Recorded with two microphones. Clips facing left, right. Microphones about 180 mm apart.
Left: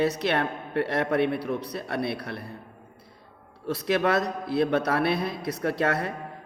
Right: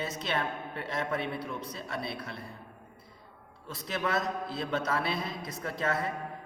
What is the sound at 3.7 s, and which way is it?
A man's voice, 70° left (ahead or behind).